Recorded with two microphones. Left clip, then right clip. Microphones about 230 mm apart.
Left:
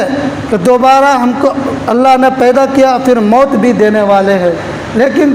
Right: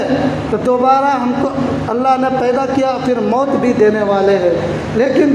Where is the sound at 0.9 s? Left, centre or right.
Left.